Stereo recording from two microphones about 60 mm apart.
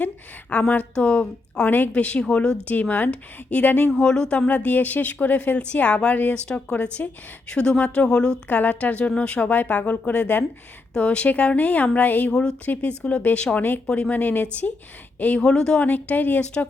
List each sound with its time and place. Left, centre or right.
0.5 s a woman's voice: left
2.9 s a woman's voice: left
3.9 s a woman's voice: centre
8.4 s a woman's voice: left
12.3 s speech: centre
12.6 s a woman's voice: left
13.8 s a woman's voice: centre
15.4 s speech: centre
15.9 s a woman's voice: left